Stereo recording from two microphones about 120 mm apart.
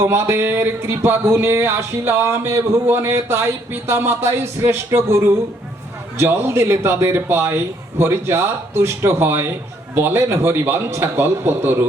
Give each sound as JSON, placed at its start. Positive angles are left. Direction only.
{"t": 0.0, "sound": "speech", "side_deg": -20}